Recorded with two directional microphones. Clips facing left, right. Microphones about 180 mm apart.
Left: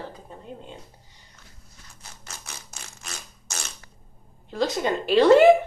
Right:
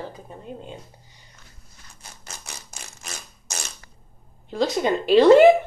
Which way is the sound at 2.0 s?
15° right (ahead or behind).